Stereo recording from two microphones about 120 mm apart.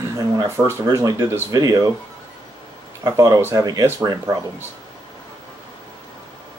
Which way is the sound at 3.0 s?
25° right (ahead or behind).